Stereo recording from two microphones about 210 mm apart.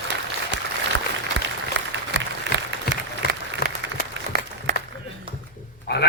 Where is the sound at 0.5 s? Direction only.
55° right (ahead or behind).